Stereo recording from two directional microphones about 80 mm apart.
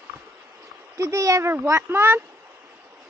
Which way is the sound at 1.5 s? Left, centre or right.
Right.